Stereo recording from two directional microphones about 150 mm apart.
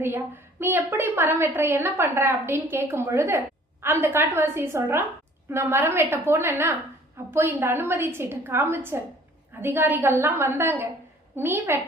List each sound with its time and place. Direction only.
0.0 s a woman's voice: 15° right (ahead or behind)